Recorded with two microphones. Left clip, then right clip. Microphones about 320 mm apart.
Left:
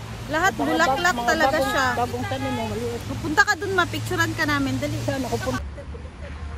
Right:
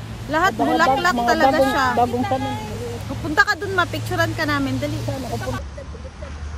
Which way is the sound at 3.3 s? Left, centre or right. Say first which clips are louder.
Right 2 dB; centre.